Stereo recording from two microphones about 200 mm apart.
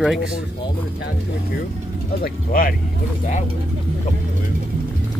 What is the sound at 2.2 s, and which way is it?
Speech, 45° left (ahead or behind).